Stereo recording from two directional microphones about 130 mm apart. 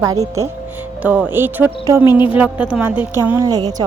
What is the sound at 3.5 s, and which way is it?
Music, 30° right (ahead or behind).